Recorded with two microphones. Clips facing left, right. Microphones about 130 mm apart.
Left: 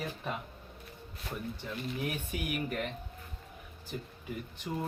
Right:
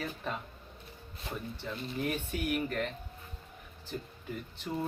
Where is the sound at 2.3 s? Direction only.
10° left (ahead or behind).